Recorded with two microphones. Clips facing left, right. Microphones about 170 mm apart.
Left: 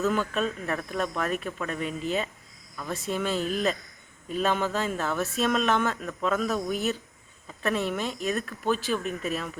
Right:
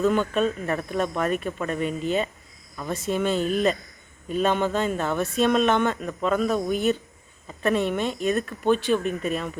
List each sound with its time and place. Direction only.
0.0 s speech: centre (ahead or behind)